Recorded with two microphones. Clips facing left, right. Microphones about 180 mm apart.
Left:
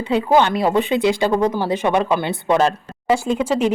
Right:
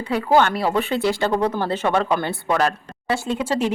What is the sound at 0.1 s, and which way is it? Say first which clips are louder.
Speech: left 2 dB; 20° left (ahead or behind).